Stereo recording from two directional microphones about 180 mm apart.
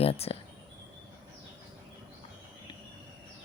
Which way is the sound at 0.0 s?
35° left (ahead or behind).